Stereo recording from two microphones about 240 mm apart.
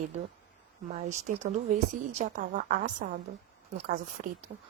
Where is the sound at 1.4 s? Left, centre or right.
Right.